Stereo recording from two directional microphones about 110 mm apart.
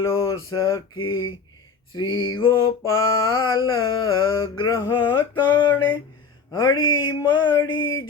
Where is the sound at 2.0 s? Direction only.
50° left (ahead or behind).